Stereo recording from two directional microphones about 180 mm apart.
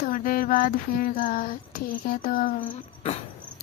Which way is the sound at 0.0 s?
50° left (ahead or behind).